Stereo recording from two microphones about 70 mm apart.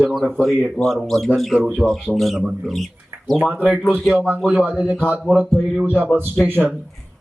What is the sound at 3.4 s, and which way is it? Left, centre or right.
Speech, right.